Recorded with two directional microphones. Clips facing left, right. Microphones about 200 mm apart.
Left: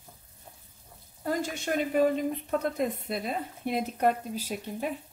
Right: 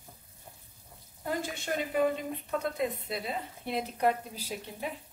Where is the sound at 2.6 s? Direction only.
45° left (ahead or behind).